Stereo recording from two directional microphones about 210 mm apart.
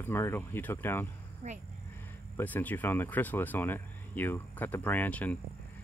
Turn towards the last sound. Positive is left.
turn(degrees=5)  # may be behind; listen again after turning